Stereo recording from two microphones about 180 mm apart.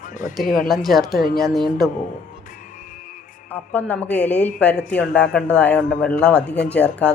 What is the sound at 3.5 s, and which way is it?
Speech, 10° left (ahead or behind).